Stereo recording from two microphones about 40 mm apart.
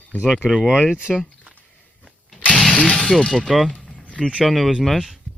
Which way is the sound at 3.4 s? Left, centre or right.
Centre.